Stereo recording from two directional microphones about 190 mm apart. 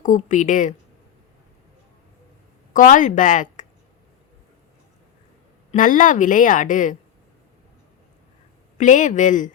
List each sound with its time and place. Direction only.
0.3 s a woman's voice: 40° left (ahead or behind)
2.7 s speech: 45° left (ahead or behind)
5.7 s a woman's voice: 45° left (ahead or behind)
8.8 s speech: 40° left (ahead or behind)